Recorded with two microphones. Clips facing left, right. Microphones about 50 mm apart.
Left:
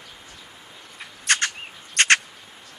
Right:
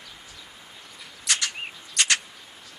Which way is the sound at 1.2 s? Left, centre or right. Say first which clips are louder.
Left 6 dB; left.